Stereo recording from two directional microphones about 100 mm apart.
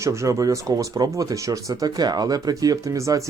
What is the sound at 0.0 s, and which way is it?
Speech, 30° right (ahead or behind).